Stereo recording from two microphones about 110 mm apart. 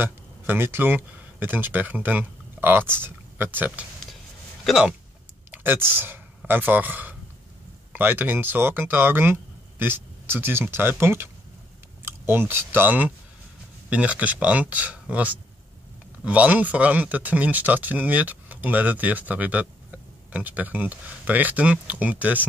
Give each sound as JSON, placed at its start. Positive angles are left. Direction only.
{"t": 0.0, "sound": "speech", "side_deg": -20}
{"t": 4.6, "sound": "speech", "side_deg": -5}
{"t": 5.5, "sound": "speech", "side_deg": -20}